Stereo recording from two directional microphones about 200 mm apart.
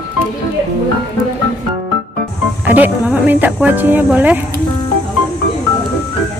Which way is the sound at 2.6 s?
10° right (ahead or behind).